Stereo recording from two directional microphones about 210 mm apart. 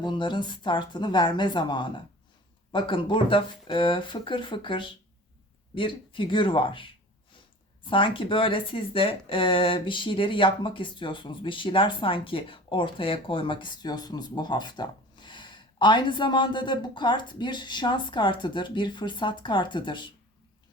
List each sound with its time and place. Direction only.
0.0 s speech: 20° left (ahead or behind)